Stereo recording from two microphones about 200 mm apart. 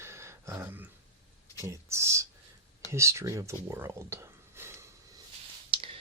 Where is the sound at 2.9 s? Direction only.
15° right (ahead or behind).